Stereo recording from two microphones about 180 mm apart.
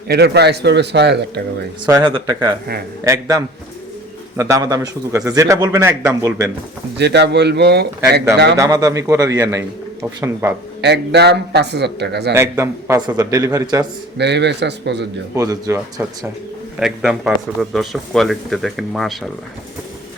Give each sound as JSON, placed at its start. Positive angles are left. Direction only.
{"t": 0.1, "sound": "a man's voice", "side_deg": -65}
{"t": 1.9, "sound": "a man's voice", "side_deg": -25}
{"t": 6.9, "sound": "a man's voice", "side_deg": -70}
{"t": 8.5, "sound": "a man's voice", "side_deg": -20}
{"t": 10.8, "sound": "a man's voice", "side_deg": -70}
{"t": 12.3, "sound": "a man's voice", "side_deg": -15}
{"t": 14.2, "sound": "a man's voice", "side_deg": -70}
{"t": 15.4, "sound": "a man's voice", "side_deg": -20}
{"t": 16.8, "sound": "speech", "side_deg": -5}